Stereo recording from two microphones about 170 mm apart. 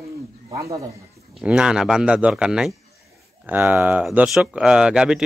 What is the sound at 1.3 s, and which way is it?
Speech, 5° right (ahead or behind).